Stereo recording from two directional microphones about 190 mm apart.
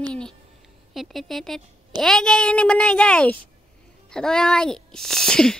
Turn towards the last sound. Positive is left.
turn(degrees=5)  # may be behind; listen again after turning